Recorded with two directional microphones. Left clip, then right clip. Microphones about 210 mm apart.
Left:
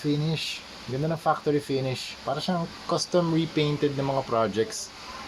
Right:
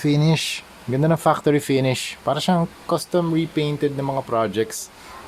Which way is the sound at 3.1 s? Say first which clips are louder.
Right 3 dB; 20° right (ahead or behind).